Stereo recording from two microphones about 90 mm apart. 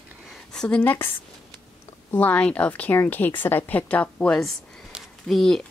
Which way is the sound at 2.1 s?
20° left (ahead or behind).